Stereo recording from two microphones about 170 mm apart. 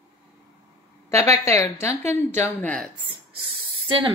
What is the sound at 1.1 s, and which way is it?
A woman's voice, 15° left (ahead or behind).